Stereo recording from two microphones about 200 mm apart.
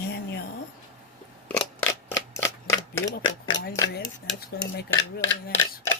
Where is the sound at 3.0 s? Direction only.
65° left (ahead or behind).